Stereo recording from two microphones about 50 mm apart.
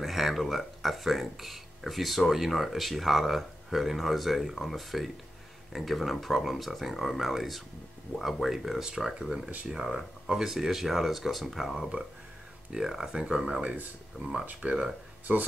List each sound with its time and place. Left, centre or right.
0.0 s speech: centre
13.1 s speech: centre
14.2 s speech: centre
14.6 s speech: centre